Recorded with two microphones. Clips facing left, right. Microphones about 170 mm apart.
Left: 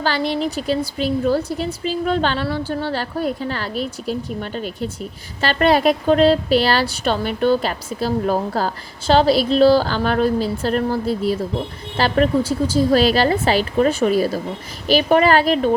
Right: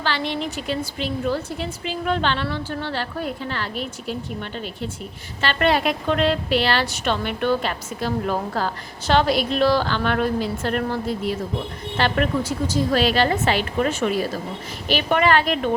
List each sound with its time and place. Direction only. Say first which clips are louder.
0.0 s a woman's voice: left 5 dB; 40° left (ahead or behind)